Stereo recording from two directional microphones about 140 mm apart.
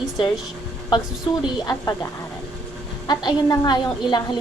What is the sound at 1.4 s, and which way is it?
Speech, 25° left (ahead or behind).